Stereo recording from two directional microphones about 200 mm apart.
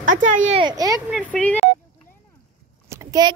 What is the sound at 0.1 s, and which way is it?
Speech, 40° right (ahead or behind).